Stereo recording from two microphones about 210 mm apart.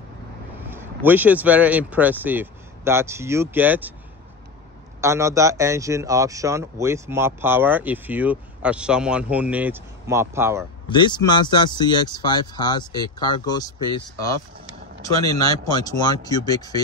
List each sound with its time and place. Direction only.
0.7 s speech: 10° right (ahead or behind)
5.0 s speech: 15° right (ahead or behind)
10.9 s speech: 20° left (ahead or behind)
15.4 s speech: 20° left (ahead or behind)